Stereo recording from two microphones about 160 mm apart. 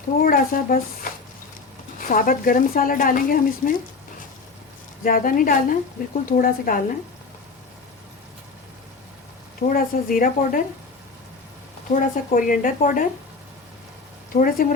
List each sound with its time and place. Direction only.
0.2 s a woman's voice: 65° left (ahead or behind)
1.1 s a sound: 60° left (ahead or behind)
2.0 s a woman's voice: 60° left (ahead or behind)
5.0 s a woman's voice: 60° left (ahead or behind)
9.6 s a woman's voice: 60° left (ahead or behind)
11.9 s a woman's voice: 55° left (ahead or behind)
14.3 s a woman's voice: 60° left (ahead or behind)